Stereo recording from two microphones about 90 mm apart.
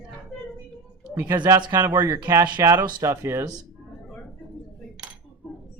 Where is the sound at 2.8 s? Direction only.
55° right (ahead or behind).